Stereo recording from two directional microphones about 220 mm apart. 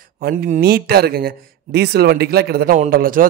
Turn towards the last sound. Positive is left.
turn(degrees=-40)  # may be behind; listen again after turning